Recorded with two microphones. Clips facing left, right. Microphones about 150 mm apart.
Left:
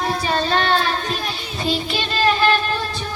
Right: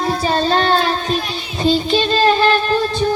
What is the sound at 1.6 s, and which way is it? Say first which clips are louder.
Music: right 8 dB; 30° right (ahead or behind).